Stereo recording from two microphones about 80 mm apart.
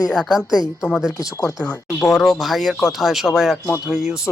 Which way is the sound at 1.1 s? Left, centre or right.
Left.